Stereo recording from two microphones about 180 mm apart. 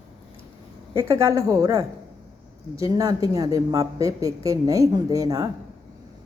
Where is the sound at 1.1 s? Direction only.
15° right (ahead or behind).